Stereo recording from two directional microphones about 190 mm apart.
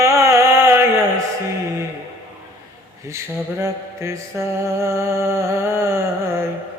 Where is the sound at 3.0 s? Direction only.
15° right (ahead or behind).